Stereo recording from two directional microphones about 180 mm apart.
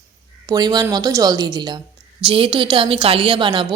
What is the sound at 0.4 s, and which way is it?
Speech, 20° right (ahead or behind).